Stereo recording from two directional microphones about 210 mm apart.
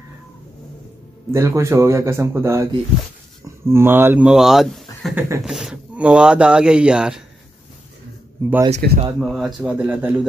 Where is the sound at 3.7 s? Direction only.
10° right (ahead or behind).